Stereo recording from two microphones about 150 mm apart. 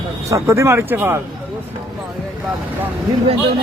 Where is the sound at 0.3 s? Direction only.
20° right (ahead or behind).